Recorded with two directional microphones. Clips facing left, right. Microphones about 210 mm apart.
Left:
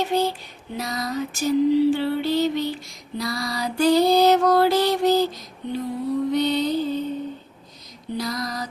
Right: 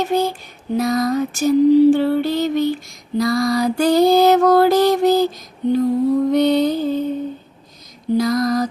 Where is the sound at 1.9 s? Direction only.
50° right (ahead or behind).